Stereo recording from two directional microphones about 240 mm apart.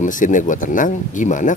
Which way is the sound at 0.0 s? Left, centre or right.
Left.